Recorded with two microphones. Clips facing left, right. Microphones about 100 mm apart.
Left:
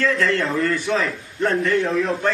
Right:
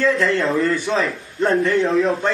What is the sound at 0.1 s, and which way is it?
A man's voice, 30° right (ahead or behind).